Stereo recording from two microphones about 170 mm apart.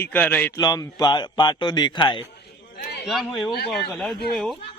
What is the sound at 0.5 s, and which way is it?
Speech, 25° left (ahead or behind).